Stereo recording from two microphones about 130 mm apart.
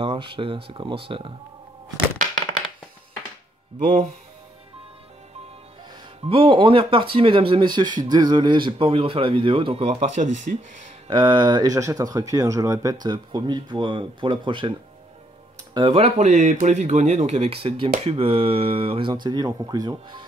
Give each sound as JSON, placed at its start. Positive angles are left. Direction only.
{"t": 0.0, "sound": "speech", "side_deg": -40}
{"t": 6.2, "sound": "speech", "side_deg": -45}
{"t": 11.1, "sound": "speech", "side_deg": -35}
{"t": 15.7, "sound": "speech", "side_deg": -45}